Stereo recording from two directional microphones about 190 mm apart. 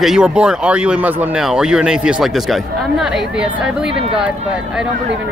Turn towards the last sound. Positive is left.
turn(degrees=-5)  # may be behind; listen again after turning